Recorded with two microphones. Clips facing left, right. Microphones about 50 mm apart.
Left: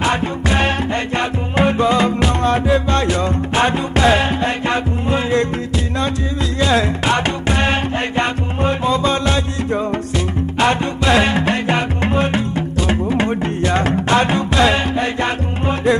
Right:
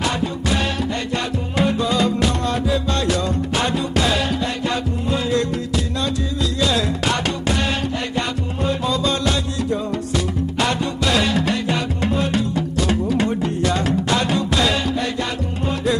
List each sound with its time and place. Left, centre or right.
0.0 s music: left
6.6 s music: left